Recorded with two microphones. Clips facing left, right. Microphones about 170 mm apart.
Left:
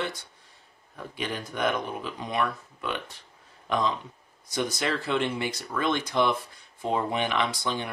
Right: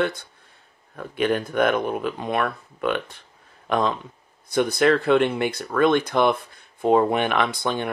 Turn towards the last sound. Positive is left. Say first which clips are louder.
# right 5 dB
turn(degrees=-55)  # may be behind; listen again after turning